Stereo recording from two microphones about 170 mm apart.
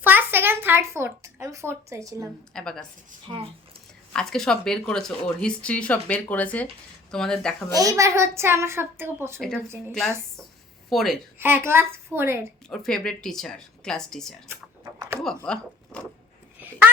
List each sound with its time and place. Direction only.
0.0 s a child's voice: 10° right (ahead or behind)
2.5 s speech: 5° left (ahead or behind)
4.1 s speech: 5° left (ahead or behind)
7.7 s a woman's voice: 20° right (ahead or behind)
10.8 s a woman's voice: centre (ahead or behind)
11.3 s a woman's voice: 15° right (ahead or behind)
12.6 s speech: 5° left (ahead or behind)
14.4 s typing: 15° right (ahead or behind)
15.4 s speech: 5° left (ahead or behind)